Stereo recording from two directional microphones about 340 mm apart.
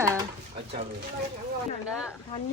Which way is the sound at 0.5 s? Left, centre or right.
Right.